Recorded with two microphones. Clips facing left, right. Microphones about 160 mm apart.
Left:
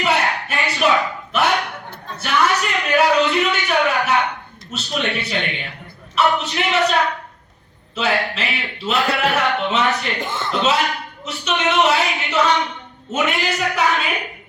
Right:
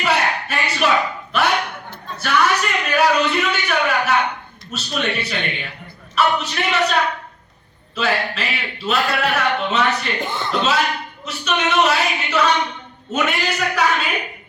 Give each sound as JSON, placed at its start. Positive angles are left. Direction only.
{"t": 0.0, "sound": "a sound", "side_deg": 20}
{"t": 4.7, "sound": "speech", "side_deg": 20}
{"t": 7.9, "sound": "speech", "side_deg": 20}
{"t": 10.2, "sound": "speech", "side_deg": 0}
{"t": 10.5, "sound": "speech", "side_deg": 20}